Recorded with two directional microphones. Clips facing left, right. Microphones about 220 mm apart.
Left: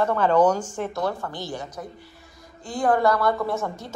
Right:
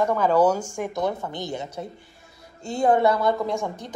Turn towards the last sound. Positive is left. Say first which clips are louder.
# even
turn(degrees=-15)  # may be behind; listen again after turning